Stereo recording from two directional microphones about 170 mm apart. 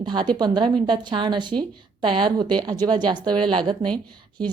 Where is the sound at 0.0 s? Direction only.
25° right (ahead or behind).